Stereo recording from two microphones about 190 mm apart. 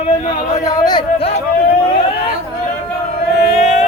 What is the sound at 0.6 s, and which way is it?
Speech, 20° left (ahead or behind).